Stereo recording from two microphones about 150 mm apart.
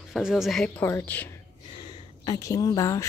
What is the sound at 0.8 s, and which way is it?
Speech, 15° left (ahead or behind).